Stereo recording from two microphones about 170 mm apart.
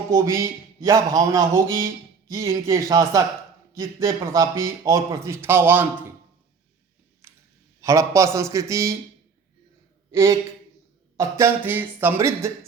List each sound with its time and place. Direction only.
0.1 s a man's voice: 20° right (ahead or behind)
7.2 s clicking: 15° right (ahead or behind)
7.8 s a man's voice: 20° right (ahead or behind)
10.1 s a man's voice: 20° right (ahead or behind)